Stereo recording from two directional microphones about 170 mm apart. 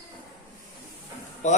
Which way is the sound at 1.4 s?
45° left (ahead or behind).